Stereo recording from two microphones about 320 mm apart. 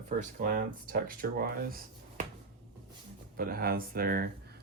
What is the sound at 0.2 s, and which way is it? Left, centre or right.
Speech, right.